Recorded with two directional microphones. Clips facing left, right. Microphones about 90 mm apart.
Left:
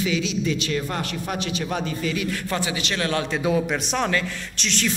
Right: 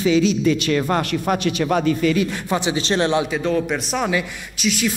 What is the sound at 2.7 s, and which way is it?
Speech, 30° right (ahead or behind).